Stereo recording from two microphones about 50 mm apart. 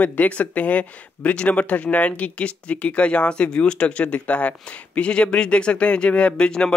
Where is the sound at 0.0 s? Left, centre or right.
Left.